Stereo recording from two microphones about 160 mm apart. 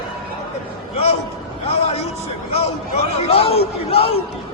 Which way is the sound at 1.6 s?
40° left (ahead or behind).